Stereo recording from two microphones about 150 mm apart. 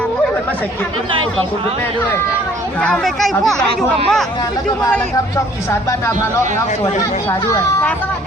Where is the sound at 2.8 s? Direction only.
5° left (ahead or behind).